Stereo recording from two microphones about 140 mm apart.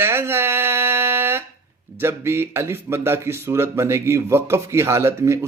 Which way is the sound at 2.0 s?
15° right (ahead or behind).